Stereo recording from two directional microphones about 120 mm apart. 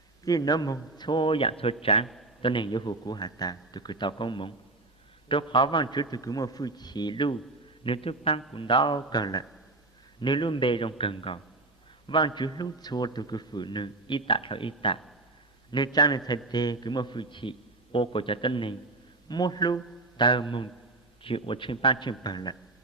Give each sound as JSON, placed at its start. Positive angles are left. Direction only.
{"t": 0.3, "sound": "a man's voice", "side_deg": 30}
{"t": 2.4, "sound": "a man's voice", "side_deg": 40}
{"t": 7.9, "sound": "a man's voice", "side_deg": 50}